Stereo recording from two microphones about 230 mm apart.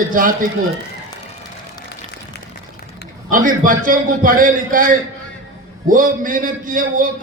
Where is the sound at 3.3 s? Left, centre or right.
Right.